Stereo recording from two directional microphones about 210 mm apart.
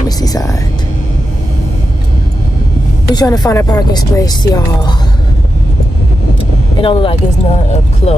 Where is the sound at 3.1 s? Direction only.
20° left (ahead or behind).